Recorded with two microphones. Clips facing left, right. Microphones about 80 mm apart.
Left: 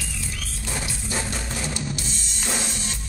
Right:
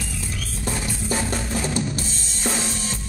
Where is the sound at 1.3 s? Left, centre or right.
Right.